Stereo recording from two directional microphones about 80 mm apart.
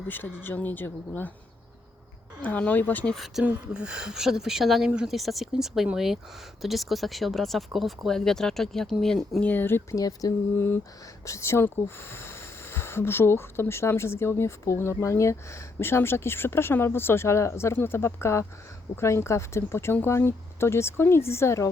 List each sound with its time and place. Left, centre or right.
0.1 s speech: left
2.4 s speech: left
3.4 s speech: centre
9.4 s speech: left
9.9 s speech: left
11.3 s speech: left